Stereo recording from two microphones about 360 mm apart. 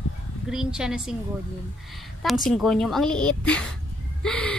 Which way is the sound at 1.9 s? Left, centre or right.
Centre.